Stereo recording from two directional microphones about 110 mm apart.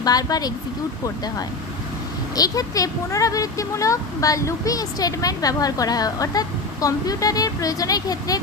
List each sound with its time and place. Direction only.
0.0 s speech: 35° left (ahead or behind)